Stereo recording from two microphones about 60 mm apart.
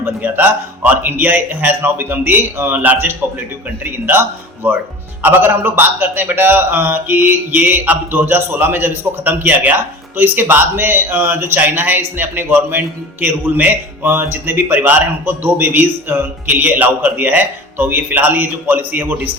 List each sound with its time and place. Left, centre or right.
0.0 s a man's voice: right